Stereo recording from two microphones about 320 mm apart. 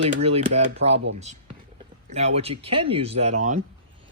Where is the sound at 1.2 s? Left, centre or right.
Right.